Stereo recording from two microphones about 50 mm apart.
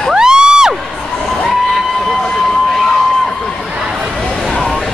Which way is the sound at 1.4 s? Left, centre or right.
Centre.